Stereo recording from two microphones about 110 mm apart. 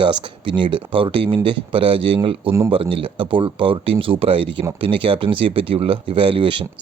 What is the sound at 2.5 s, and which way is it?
Speech, 25° right (ahead or behind).